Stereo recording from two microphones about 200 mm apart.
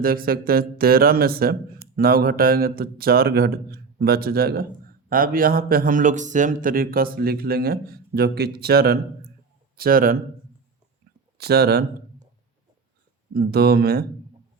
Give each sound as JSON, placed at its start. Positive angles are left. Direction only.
{"t": 0.0, "sound": "speech", "side_deg": -45}
{"t": 11.3, "sound": "speech", "side_deg": -50}
{"t": 13.3, "sound": "speech", "side_deg": -50}